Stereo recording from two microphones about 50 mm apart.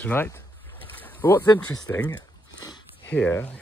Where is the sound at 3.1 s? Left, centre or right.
Left.